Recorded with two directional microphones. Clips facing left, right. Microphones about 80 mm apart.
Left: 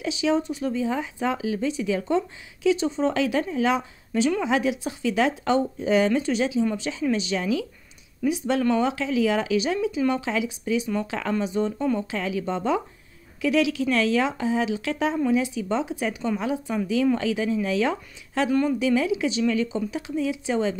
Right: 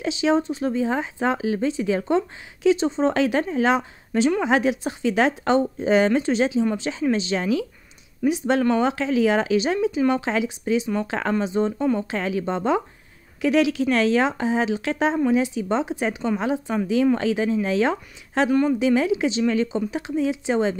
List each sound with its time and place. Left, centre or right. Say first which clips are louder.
0.0 s speech: right 3 dB; right
1.4 s speech: right 3 dB; right
11.3 s speech: right 2 dB; right
12.1 s speech: right 3 dB; right
12.4 s speech: right 2 dB; right
18.5 s speech: right 2 dB; centre
18.8 s speech: right 3 dB; right